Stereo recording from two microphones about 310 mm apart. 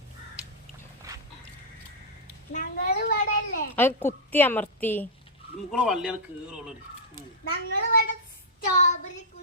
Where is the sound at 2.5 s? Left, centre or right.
Left.